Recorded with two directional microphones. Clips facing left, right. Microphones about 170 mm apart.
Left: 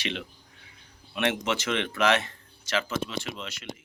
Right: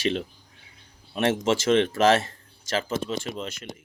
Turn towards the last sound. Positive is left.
turn(degrees=-40)  # may be behind; listen again after turning